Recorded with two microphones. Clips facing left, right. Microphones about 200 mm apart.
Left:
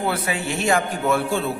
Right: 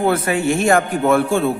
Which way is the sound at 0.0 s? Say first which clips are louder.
Right 7 dB; 50° right (ahead or behind).